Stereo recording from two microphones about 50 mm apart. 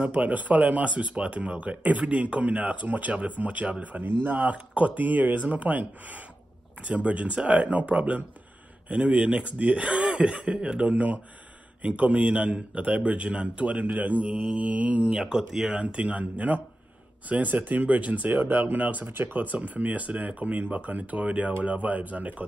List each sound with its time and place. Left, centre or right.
0.0 s speech: right
10.9 s speech: right
15.1 s speech: centre
15.8 s speech: right
19.0 s speech: right